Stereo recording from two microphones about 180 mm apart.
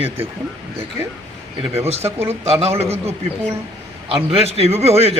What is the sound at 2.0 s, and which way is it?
Speech, 15° right (ahead or behind).